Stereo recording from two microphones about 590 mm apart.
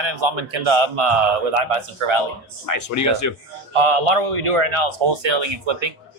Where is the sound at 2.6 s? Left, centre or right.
Left.